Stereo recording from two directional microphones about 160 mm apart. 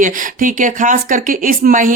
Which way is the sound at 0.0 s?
55° right (ahead or behind).